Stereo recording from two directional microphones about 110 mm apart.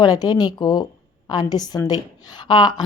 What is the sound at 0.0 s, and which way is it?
A woman's voice, 35° left (ahead or behind).